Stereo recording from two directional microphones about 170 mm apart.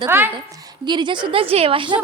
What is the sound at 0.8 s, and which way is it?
A woman's voice, 25° right (ahead or behind).